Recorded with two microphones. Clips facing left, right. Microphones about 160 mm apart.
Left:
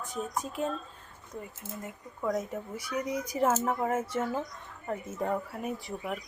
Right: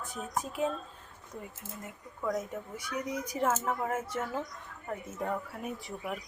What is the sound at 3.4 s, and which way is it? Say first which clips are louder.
Speech: left 3 dB; 10° left (ahead or behind).